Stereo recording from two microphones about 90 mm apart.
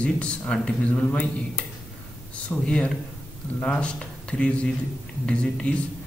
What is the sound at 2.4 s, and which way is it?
Speech, 15° left (ahead or behind).